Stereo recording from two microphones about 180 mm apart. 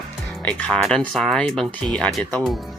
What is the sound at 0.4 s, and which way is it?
Speech, 5° left (ahead or behind).